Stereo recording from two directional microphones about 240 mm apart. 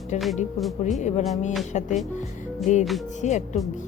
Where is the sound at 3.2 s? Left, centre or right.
Left.